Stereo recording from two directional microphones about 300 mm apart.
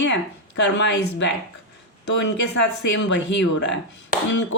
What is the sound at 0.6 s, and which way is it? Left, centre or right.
Speech, left.